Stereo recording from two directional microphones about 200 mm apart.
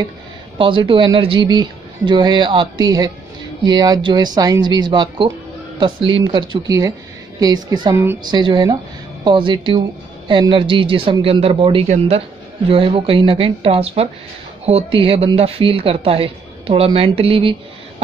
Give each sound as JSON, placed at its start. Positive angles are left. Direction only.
{"t": 0.6, "sound": "speech", "side_deg": -25}